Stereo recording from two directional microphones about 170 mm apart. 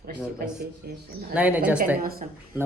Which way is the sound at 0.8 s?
65° right (ahead or behind).